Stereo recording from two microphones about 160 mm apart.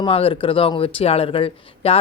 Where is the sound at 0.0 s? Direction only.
35° left (ahead or behind).